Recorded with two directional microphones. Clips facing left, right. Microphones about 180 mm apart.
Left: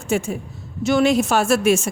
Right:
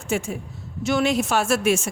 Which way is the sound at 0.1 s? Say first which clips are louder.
Left 4 dB; 35° left (ahead or behind).